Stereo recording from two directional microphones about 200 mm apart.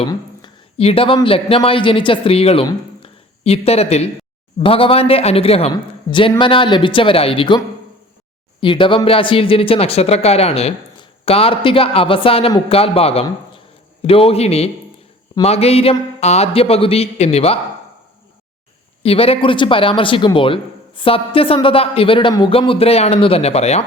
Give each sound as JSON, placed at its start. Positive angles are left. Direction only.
{"t": 0.0, "sound": "a man's voice", "side_deg": 25}
{"t": 8.6, "sound": "speech", "side_deg": 25}
{"t": 19.0, "sound": "speech", "side_deg": 30}